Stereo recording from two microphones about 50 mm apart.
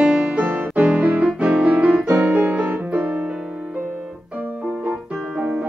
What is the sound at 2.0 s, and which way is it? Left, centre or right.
Piano, right.